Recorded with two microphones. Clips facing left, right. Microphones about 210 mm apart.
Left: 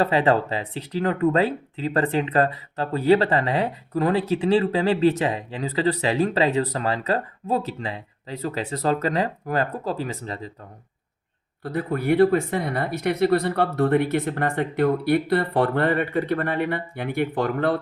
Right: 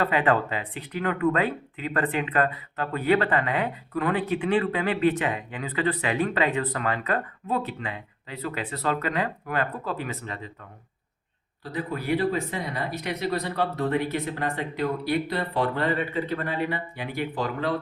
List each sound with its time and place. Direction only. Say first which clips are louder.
0.0 s speech: left 3 dB; 30° left (ahead or behind)
11.6 s speech: left 6 dB; 55° left (ahead or behind)